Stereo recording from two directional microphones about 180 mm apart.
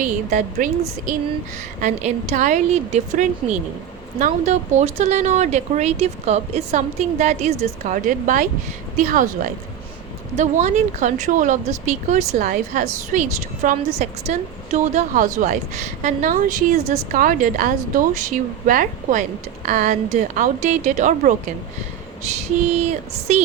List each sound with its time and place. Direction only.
0.0 s speech: 45° right (ahead or behind)
10.3 s speech: 40° right (ahead or behind)
23.3 s speech: 40° right (ahead or behind)